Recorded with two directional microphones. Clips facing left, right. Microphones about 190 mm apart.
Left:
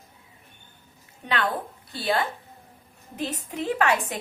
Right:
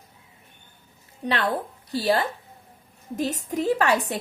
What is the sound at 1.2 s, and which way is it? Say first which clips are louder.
A woman's voice: right 2 dB; 35° right (ahead or behind).